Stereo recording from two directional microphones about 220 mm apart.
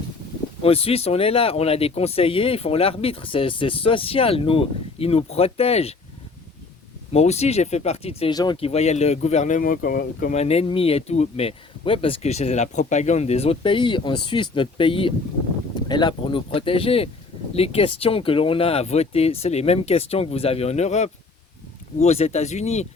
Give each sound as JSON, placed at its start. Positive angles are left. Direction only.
{"t": 0.6, "sound": "speech", "side_deg": 25}
{"t": 7.1, "sound": "speech", "side_deg": 30}
{"t": 10.3, "sound": "speech", "side_deg": 30}